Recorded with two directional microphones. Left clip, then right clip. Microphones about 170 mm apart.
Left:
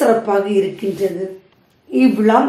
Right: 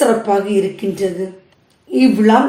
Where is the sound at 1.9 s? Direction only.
10° left (ahead or behind).